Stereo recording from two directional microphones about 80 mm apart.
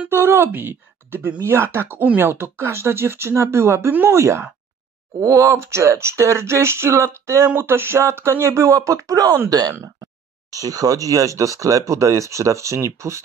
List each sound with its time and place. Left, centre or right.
0.1 s speech: right